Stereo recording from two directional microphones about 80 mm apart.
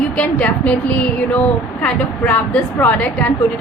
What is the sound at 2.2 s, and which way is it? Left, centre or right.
Speech, left.